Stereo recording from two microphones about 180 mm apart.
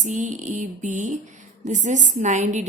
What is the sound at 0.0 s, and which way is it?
A woman's voice, 45° right (ahead or behind).